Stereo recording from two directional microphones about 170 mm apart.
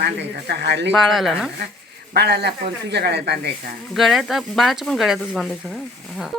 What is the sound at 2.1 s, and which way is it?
Speech, 75° right (ahead or behind).